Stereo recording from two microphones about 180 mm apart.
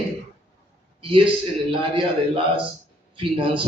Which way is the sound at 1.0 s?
30° right (ahead or behind).